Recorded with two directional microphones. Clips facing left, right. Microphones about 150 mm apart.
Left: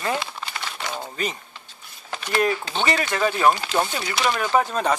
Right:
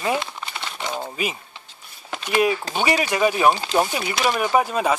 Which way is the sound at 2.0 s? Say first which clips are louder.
Right 2 dB; 10° right (ahead or behind).